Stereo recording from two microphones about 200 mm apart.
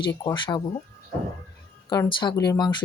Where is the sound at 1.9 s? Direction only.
20° left (ahead or behind).